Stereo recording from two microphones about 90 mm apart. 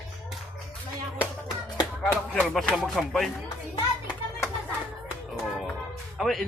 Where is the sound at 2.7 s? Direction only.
5° right (ahead or behind).